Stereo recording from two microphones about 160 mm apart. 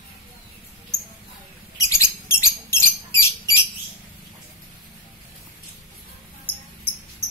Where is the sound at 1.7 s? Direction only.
20° left (ahead or behind).